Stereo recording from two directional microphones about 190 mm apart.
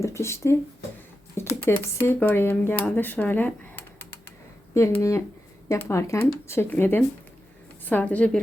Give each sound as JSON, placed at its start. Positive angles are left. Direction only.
{"t": 0.0, "sound": "speech", "side_deg": 15}
{"t": 1.6, "sound": "speech", "side_deg": 10}